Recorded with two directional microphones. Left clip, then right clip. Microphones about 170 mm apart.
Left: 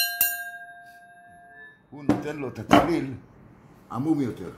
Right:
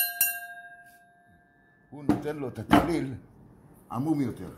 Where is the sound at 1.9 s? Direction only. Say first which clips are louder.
Left 2 dB; 20° right (ahead or behind).